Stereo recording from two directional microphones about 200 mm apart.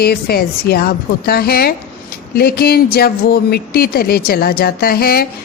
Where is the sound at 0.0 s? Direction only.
50° left (ahead or behind).